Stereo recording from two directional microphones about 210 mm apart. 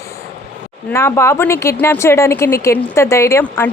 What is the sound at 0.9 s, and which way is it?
A woman's voice, 15° left (ahead or behind).